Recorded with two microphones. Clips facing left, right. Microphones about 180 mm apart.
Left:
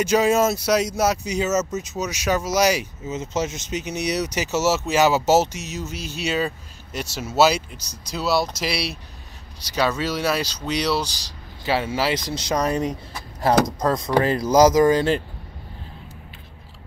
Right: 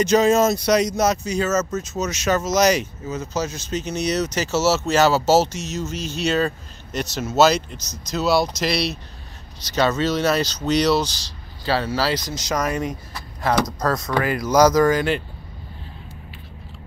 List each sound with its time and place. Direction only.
0.0 s speech: 10° left (ahead or behind)
3.1 s speech: 25° left (ahead or behind); by 11.0 s 5° left (ahead or behind)
11.6 s speech: 20° left (ahead or behind)
13.7 s speech: 15° left (ahead or behind)
14.0 s speech: 30° left (ahead or behind)